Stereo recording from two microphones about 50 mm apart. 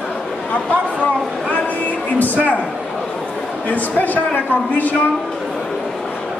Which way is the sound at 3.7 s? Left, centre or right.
Left.